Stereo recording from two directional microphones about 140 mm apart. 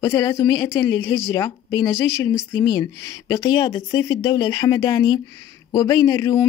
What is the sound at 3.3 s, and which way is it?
A woman's voice, 35° left (ahead or behind).